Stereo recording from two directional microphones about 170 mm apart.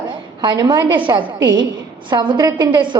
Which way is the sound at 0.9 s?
25° right (ahead or behind).